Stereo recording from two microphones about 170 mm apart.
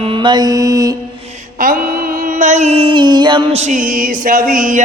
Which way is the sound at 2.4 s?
45° right (ahead or behind).